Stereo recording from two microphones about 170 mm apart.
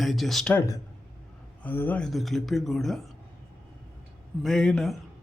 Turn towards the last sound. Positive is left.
turn(degrees=0)  # may be behind; listen again after turning